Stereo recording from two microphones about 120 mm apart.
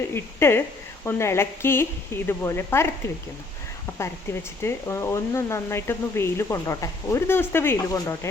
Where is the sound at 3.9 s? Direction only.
20° left (ahead or behind).